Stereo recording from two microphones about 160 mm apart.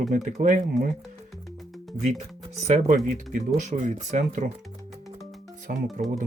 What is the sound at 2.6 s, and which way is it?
Speech, 45° right (ahead or behind).